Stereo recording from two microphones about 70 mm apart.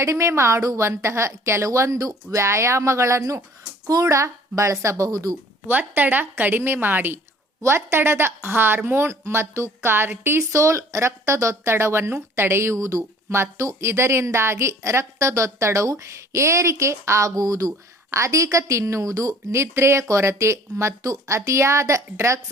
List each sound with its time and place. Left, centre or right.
0.0 s a woman's voice: right
3.8 s a woman's voice: right
5.6 s a woman's voice: right